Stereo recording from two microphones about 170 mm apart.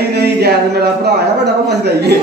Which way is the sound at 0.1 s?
70° right (ahead or behind).